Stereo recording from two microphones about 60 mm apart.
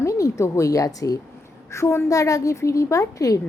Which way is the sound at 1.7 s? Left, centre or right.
Left.